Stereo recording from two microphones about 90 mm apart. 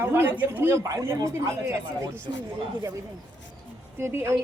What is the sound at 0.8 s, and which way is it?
A woman's voice, 35° right (ahead or behind).